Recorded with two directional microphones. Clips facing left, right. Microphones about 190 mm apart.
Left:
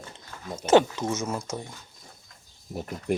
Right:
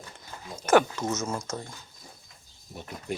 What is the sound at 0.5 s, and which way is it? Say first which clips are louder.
Speech: left 2 dB; 25° left (ahead or behind).